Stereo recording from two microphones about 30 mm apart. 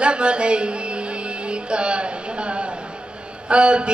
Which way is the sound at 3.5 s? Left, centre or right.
Right.